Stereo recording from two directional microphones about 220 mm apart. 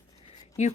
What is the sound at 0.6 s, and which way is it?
Speech, 30° left (ahead or behind).